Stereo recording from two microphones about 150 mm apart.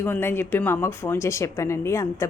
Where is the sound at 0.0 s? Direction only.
15° left (ahead or behind).